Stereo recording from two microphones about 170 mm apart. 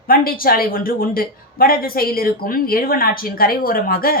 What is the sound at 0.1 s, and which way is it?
A woman's voice, 60° left (ahead or behind).